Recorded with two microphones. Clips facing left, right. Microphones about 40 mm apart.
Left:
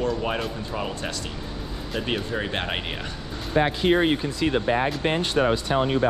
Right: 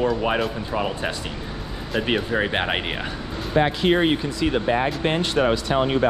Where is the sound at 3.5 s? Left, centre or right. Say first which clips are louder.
Right 1 dB; right.